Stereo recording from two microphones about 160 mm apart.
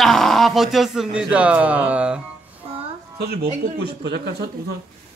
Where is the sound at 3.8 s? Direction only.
90° right.